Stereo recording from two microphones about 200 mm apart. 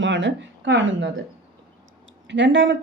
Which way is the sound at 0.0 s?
65° right (ahead or behind).